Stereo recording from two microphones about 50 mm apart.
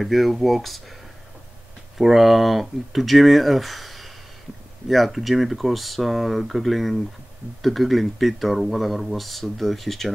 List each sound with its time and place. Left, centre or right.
0.0 s speech: centre
2.0 s speech: centre